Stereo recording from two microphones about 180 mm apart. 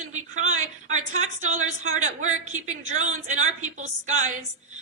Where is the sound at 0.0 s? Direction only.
40° right (ahead or behind).